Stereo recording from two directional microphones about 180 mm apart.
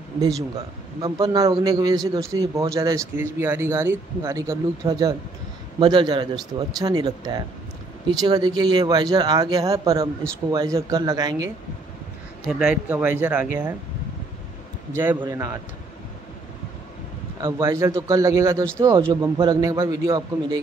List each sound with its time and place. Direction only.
1.0 s speech: 20° right (ahead or behind)
12.4 s speech: 5° right (ahead or behind)
14.9 s speech: 10° right (ahead or behind)
17.4 s speech: 20° right (ahead or behind)